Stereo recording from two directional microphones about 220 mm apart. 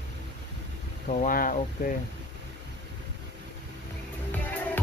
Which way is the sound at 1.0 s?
35° left (ahead or behind).